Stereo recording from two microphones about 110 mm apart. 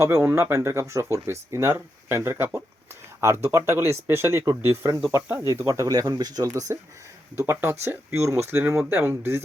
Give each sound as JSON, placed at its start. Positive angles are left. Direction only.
{"t": 0.0, "sound": "speech", "side_deg": -25}